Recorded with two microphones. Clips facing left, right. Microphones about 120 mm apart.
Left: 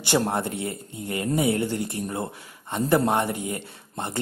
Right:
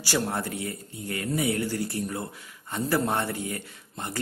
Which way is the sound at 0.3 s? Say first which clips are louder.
Left 4 dB; 25° left (ahead or behind).